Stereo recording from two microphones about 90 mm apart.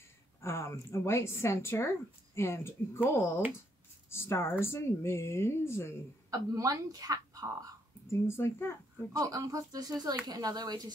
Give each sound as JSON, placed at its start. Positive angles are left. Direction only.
{"t": 0.4, "sound": "a woman's voice", "side_deg": 30}
{"t": 6.3, "sound": "a woman's voice", "side_deg": -40}
{"t": 8.1, "sound": "speech", "side_deg": 30}
{"t": 9.1, "sound": "a woman's voice", "side_deg": -40}